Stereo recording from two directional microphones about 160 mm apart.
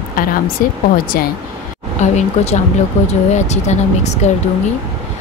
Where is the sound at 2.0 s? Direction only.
45° left (ahead or behind).